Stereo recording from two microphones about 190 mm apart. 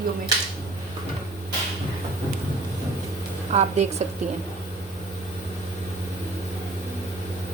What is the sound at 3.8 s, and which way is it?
Speech, 35° right (ahead or behind).